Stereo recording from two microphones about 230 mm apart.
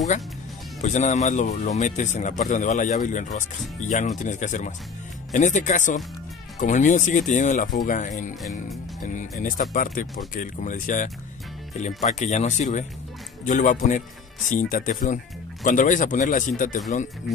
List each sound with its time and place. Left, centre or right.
0.7 s speech: left
8.4 s jingle bell: centre
9.0 s speech: left